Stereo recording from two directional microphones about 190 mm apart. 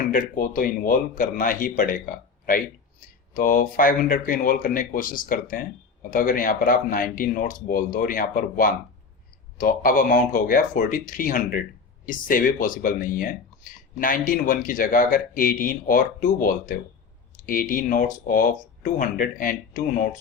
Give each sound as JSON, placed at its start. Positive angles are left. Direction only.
{"t": 0.0, "sound": "speech", "side_deg": 45}